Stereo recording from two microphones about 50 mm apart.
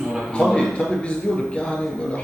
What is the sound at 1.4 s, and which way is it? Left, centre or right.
Speech, centre.